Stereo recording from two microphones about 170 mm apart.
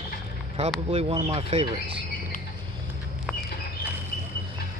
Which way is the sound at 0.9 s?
35° right (ahead or behind).